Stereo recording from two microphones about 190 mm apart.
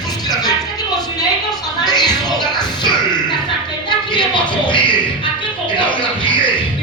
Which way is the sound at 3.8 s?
25° left (ahead or behind).